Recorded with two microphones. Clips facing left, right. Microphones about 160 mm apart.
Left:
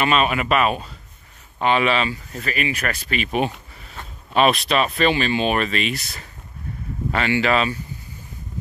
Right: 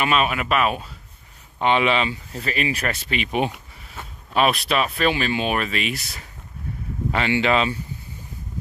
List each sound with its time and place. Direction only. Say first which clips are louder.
0.0 s speech: left 2 dB; 5° right (ahead or behind)
1.6 s speech: even; 20° right (ahead or behind)